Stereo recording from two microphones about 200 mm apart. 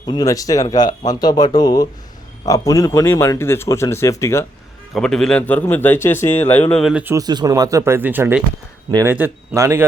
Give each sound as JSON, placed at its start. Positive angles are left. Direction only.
{"t": 0.0, "sound": "speech", "side_deg": 20}
{"t": 4.9, "sound": "a man's voice", "side_deg": 5}